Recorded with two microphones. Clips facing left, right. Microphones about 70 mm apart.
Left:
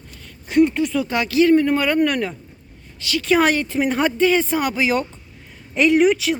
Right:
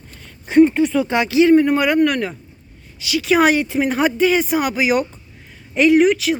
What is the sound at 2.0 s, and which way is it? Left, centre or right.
A woman's voice, centre.